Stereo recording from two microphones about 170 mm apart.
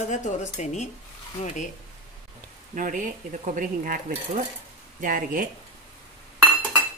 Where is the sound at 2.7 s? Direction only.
50° right (ahead or behind).